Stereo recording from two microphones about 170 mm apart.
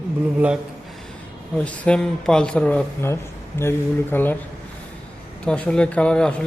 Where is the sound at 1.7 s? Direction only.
5° left (ahead or behind).